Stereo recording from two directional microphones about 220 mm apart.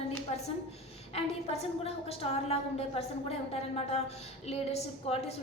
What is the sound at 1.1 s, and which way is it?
A woman's voice, 25° left (ahead or behind).